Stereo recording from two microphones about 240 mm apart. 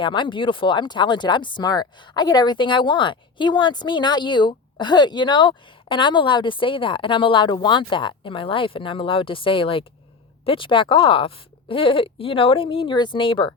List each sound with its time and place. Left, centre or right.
0.0 s speech: centre